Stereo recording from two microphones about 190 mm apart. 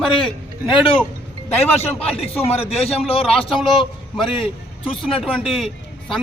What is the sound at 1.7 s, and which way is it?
A man's voice, 30° left (ahead or behind).